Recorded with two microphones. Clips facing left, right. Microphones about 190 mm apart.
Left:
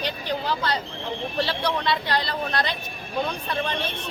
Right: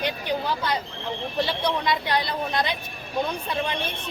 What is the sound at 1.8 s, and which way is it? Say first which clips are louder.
Speech: even; 15° right (ahead or behind).